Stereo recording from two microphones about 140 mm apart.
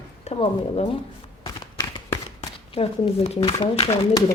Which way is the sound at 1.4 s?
35° left (ahead or behind).